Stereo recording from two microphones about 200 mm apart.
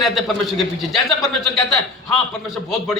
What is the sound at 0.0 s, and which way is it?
A man's voice, centre (ahead or behind).